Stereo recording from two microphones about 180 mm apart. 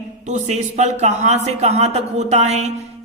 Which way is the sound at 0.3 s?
40° right (ahead or behind).